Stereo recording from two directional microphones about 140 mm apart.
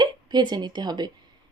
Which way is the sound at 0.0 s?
30° right (ahead or behind).